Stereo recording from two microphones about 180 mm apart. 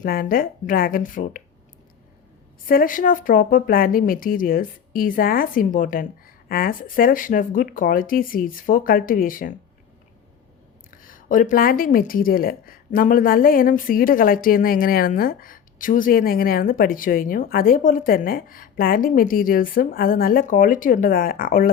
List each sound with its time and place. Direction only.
0.0 s a woman's voice: 55° left (ahead or behind)
2.6 s a woman's voice: 50° left (ahead or behind)
10.9 s a woman's voice: 50° left (ahead or behind)